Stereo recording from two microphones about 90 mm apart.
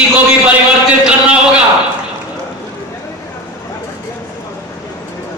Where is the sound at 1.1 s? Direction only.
10° right (ahead or behind).